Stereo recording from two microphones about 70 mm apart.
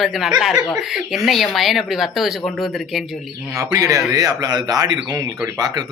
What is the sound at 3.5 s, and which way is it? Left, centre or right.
Speech, right.